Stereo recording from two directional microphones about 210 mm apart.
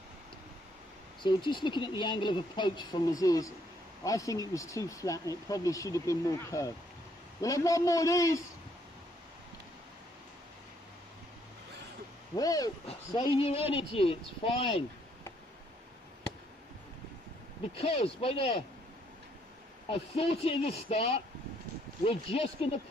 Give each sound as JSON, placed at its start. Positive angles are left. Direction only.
{"t": 1.2, "sound": "speech", "side_deg": 20}
{"t": 12.4, "sound": "speech", "side_deg": 15}
{"t": 17.7, "sound": "speech", "side_deg": 25}
{"t": 19.9, "sound": "speech", "side_deg": 30}